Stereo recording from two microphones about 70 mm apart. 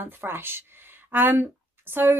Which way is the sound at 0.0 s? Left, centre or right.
Right.